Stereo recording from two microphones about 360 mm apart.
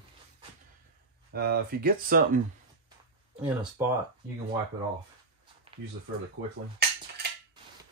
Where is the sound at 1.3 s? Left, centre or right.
Right.